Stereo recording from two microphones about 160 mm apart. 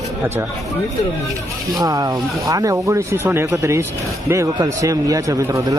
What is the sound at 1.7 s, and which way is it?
Speech, 25° right (ahead or behind).